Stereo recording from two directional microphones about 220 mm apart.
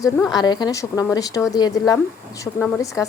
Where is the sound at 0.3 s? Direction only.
20° left (ahead or behind).